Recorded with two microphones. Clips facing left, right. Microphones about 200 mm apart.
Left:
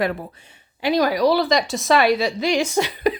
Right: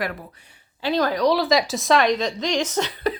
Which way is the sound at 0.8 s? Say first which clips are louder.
Left 2 dB; 10° left (ahead or behind).